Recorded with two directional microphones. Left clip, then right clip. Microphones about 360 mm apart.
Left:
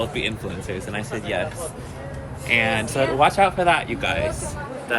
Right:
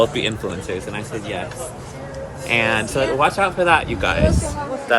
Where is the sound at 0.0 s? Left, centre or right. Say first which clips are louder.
Right 7 dB; centre.